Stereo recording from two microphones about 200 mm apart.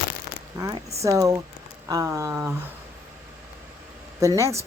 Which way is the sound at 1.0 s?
15° right (ahead or behind).